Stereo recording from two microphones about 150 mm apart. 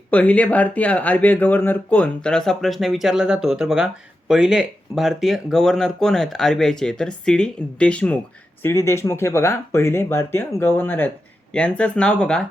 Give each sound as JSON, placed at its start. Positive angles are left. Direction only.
{"t": 0.1, "sound": "speech", "side_deg": 10}